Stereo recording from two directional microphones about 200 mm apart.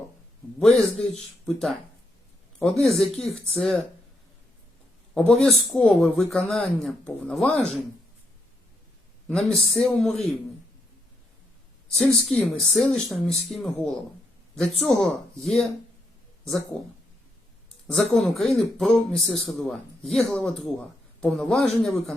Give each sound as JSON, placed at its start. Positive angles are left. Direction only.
{"t": 0.8, "sound": "a man's voice", "side_deg": 0}
{"t": 5.1, "sound": "a man's voice", "side_deg": 5}
{"t": 9.6, "sound": "a man's voice", "side_deg": 5}
{"t": 11.9, "sound": "a man's voice", "side_deg": 0}
{"t": 17.9, "sound": "a man's voice", "side_deg": 0}